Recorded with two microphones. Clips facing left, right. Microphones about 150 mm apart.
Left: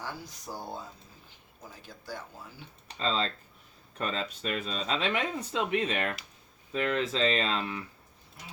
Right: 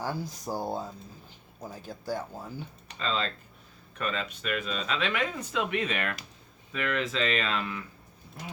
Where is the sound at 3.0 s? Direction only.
30° left (ahead or behind).